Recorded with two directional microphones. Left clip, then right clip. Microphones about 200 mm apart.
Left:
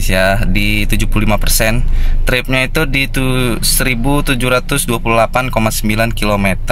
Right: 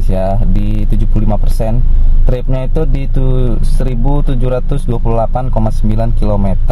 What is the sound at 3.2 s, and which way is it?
Speech, 25° left (ahead or behind).